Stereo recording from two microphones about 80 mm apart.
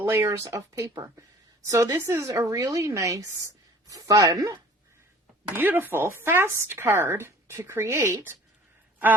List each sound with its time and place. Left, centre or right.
0.0 s a woman's voice: right
5.5 s speech: right